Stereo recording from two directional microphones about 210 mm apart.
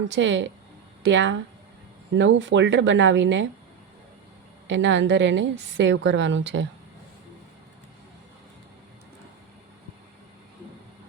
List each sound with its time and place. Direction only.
0.1 s a woman's voice: 60° right (ahead or behind)
4.7 s a woman's voice: 60° right (ahead or behind)